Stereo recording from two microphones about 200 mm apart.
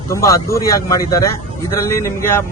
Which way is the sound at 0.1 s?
15° left (ahead or behind).